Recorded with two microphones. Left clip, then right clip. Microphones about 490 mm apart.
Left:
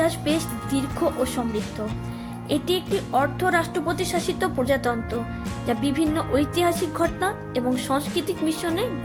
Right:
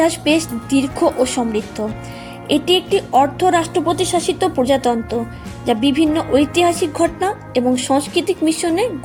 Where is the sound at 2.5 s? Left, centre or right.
Left.